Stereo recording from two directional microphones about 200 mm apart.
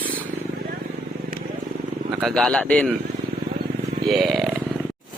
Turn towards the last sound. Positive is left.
turn(degrees=0)  # may be behind; listen again after turning